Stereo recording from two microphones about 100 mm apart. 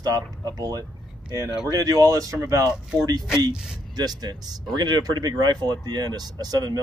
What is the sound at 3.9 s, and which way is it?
Speech, 40° right (ahead or behind).